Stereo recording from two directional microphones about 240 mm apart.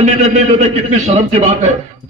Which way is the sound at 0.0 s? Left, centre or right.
Right.